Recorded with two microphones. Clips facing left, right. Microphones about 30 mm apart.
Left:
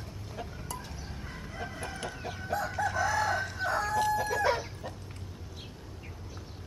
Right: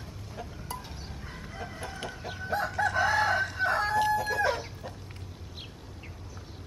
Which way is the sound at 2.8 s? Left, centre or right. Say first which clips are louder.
Right 4 dB; right.